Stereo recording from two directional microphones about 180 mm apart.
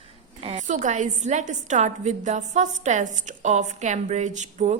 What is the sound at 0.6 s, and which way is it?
A woman's voice, 40° right (ahead or behind).